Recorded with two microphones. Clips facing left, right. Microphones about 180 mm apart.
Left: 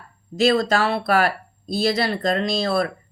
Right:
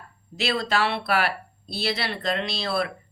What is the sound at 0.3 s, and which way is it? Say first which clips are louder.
Speech: left 7 dB; 45° left (ahead or behind).